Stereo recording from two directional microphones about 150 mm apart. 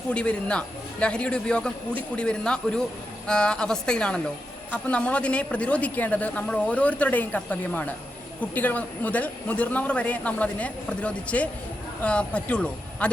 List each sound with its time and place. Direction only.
0.1 s a woman's voice: 5° left (ahead or behind)